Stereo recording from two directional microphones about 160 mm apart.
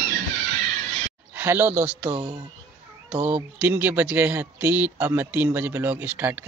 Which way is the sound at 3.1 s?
10° right (ahead or behind).